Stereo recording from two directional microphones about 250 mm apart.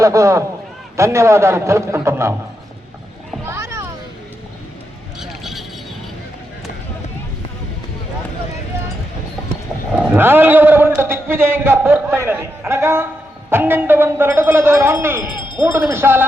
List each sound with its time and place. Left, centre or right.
0.0 s a man's voice: centre
3.4 s children playing: centre
5.2 s vehicle: centre
9.9 s a man's voice: centre
15.3 s a sound: centre
15.6 s a man's voice: centre